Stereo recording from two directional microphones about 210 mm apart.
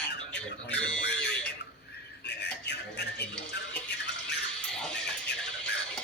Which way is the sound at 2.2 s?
50° left (ahead or behind).